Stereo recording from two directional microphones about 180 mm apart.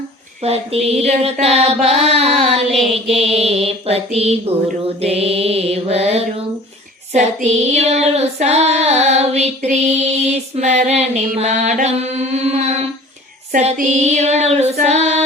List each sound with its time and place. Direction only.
0.4 s music: 35° right (ahead or behind)